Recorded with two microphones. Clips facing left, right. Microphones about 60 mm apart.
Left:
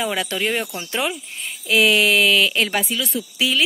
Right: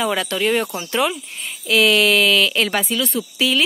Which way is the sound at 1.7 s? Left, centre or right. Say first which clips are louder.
Right 1 dB; centre.